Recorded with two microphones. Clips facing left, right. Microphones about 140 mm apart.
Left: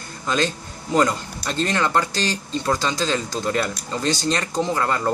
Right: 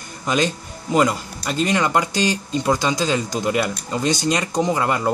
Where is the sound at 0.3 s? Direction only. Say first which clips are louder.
Right 2 dB; 15° right (ahead or behind).